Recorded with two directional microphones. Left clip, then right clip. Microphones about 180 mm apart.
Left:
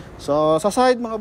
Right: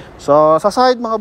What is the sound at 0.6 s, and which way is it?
Speech, 10° left (ahead or behind).